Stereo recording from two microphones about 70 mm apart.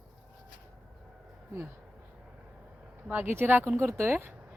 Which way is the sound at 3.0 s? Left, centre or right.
Right.